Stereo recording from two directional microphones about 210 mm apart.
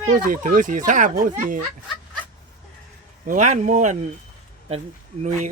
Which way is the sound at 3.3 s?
35° right (ahead or behind).